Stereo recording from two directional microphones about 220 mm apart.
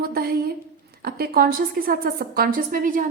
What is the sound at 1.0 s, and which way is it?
A woman's voice, 45° right (ahead or behind).